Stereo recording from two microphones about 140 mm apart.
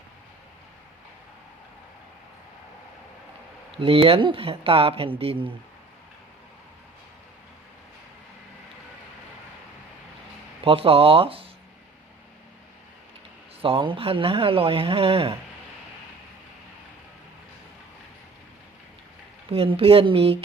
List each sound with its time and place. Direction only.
3.8 s speech: 40° right (ahead or behind)
10.6 s speech: 40° right (ahead or behind)
13.6 s speech: 40° right (ahead or behind)
19.5 s speech: 40° right (ahead or behind)